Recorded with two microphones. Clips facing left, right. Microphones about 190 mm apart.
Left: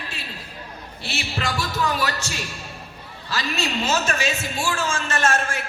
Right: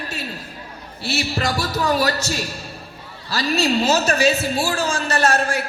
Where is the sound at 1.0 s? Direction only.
40° right (ahead or behind).